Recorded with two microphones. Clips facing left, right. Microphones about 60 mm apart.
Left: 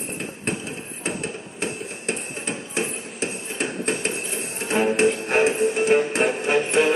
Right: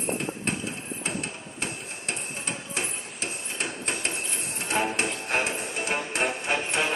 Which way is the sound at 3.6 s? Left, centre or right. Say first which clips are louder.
Left 6 dB; centre.